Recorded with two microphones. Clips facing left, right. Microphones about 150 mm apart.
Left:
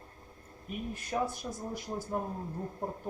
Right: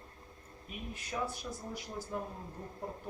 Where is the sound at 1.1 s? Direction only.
40° left (ahead or behind).